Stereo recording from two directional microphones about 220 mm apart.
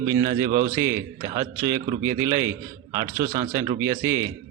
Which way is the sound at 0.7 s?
15° right (ahead or behind).